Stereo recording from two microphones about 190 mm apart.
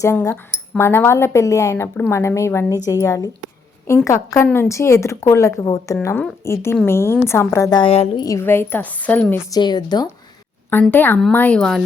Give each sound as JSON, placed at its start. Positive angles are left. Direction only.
{"t": 0.0, "sound": "a woman's voice", "side_deg": 15}
{"t": 9.5, "sound": "a woman's voice", "side_deg": 20}
{"t": 10.7, "sound": "a woman's voice", "side_deg": 10}